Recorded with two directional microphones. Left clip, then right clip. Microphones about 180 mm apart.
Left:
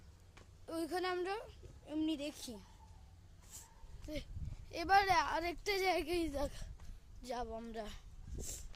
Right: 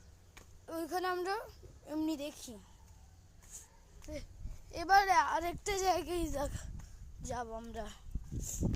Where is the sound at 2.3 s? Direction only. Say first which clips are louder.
Left 1 dB; 15° left (ahead or behind).